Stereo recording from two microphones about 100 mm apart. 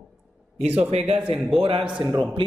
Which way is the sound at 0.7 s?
90° right.